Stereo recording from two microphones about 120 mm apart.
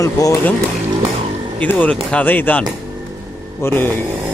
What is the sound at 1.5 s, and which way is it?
A man's voice, 10° left (ahead or behind).